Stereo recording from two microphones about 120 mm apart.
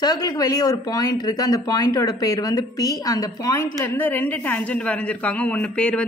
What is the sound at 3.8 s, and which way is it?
A woman's voice, 15° left (ahead or behind).